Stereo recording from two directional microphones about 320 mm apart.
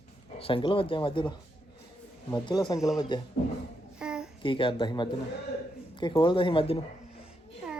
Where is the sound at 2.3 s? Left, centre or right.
Centre.